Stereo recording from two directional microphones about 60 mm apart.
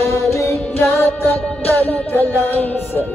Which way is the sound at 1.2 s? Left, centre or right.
Left.